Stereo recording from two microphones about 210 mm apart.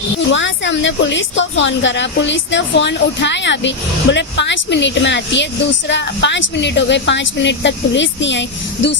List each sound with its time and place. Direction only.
0.3 s speech: 60° left (ahead or behind)